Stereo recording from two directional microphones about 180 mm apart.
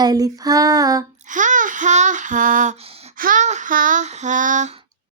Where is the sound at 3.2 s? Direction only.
50° right (ahead or behind).